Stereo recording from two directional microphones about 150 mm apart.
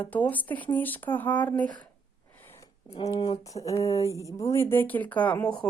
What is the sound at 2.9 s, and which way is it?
Speech, 40° left (ahead or behind).